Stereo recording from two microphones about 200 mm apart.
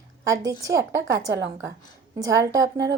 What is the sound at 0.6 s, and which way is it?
A woman's voice, 15° right (ahead or behind).